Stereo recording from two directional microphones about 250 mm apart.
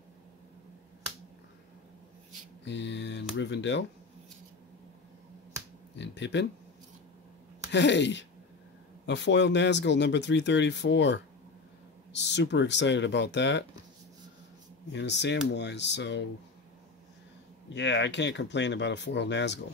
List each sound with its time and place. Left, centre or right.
2.6 s speech: left
5.9 s speech: left
7.6 s speech: left
14.9 s speech: left
17.7 s speech: left